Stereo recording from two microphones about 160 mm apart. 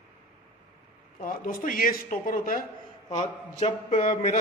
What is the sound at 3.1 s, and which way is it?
A man's voice, 40° left (ahead or behind).